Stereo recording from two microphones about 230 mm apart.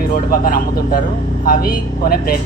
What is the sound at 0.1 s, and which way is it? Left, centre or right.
Speech, left.